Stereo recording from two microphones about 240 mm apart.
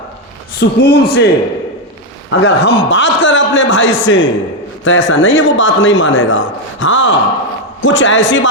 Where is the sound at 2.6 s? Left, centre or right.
Left.